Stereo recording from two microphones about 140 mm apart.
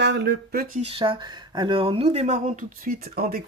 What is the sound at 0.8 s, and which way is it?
Speech, 40° right (ahead or behind).